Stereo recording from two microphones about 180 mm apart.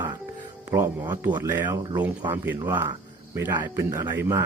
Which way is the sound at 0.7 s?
15° right (ahead or behind).